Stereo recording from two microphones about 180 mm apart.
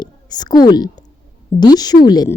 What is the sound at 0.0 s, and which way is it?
A woman's voice, 20° left (ahead or behind).